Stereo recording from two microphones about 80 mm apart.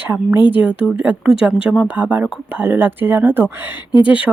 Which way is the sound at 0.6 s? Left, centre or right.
Centre.